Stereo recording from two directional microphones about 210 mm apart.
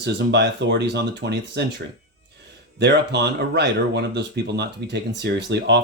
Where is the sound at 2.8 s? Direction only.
55° right (ahead or behind).